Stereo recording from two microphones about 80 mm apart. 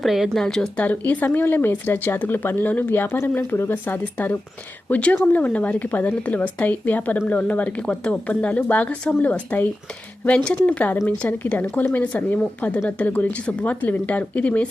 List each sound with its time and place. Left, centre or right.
0.0 s speech: centre
0.8 s speech: centre